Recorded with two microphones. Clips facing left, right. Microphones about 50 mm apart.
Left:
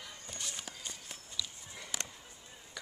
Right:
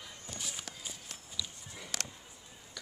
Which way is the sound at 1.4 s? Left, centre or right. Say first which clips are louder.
Even; centre.